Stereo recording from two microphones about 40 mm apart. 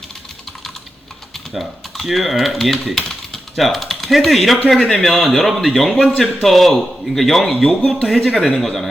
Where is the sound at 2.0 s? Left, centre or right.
Centre.